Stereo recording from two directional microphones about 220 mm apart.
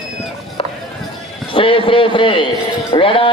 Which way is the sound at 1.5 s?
25° left (ahead or behind).